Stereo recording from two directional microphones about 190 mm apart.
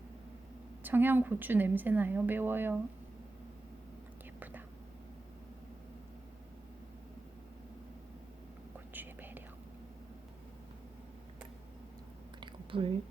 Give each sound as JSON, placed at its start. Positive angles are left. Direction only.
{"t": 0.8, "sound": "speech", "side_deg": -10}
{"t": 8.9, "sound": "whispering", "side_deg": -10}
{"t": 12.4, "sound": "whispering", "side_deg": -25}